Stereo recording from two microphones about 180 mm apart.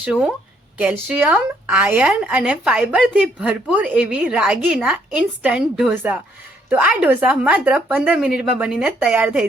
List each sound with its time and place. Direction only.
0.0 s a woman's voice: 5° right (ahead or behind)